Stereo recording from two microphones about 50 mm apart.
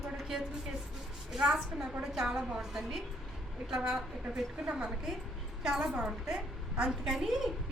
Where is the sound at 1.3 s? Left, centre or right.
Centre.